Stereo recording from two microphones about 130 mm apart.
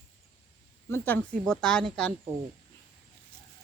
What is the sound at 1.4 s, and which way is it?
Speech, 5° left (ahead or behind).